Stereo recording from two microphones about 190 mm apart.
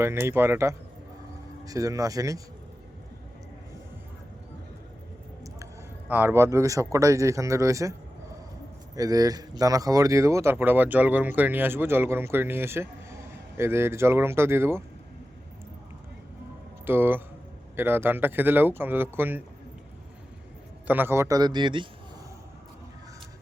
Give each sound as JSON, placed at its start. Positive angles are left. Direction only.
{"t": 0.0, "sound": "speech", "side_deg": -15}
{"t": 6.1, "sound": "speech", "side_deg": -10}
{"t": 9.0, "sound": "speech", "side_deg": -20}
{"t": 16.8, "sound": "speech", "side_deg": -10}
{"t": 20.8, "sound": "a man's voice", "side_deg": -10}